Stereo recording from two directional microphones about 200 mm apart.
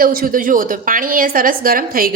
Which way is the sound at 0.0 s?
45° right (ahead or behind).